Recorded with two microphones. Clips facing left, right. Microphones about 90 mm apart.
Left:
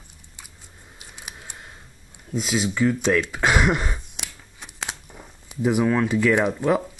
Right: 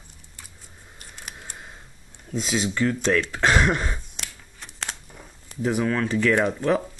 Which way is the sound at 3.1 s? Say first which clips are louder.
Even; 5° left (ahead or behind).